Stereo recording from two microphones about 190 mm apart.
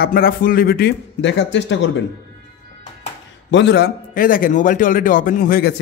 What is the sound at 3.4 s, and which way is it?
Speech, 65° left (ahead or behind).